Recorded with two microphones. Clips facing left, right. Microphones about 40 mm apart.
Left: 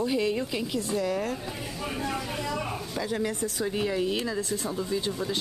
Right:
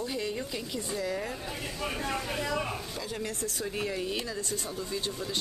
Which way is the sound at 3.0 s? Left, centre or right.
Centre.